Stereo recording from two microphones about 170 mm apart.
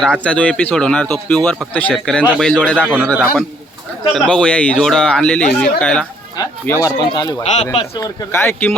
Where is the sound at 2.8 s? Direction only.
5° right (ahead or behind).